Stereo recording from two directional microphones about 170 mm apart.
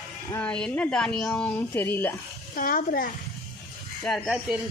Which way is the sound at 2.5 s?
55° left (ahead or behind).